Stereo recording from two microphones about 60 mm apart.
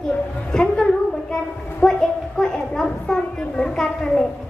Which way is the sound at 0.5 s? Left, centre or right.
Centre.